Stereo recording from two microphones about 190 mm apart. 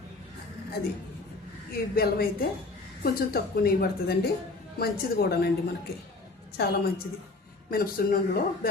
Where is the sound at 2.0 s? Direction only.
50° left (ahead or behind).